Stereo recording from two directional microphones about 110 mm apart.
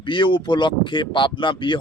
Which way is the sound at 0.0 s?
50° left (ahead or behind).